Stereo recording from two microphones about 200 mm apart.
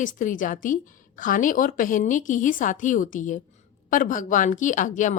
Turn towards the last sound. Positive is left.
turn(degrees=40)  # may be behind; listen again after turning